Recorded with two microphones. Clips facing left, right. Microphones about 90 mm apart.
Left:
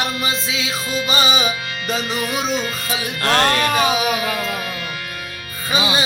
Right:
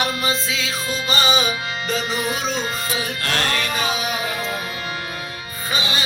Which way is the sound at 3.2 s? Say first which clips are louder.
Left 8 dB; 40° left (ahead or behind).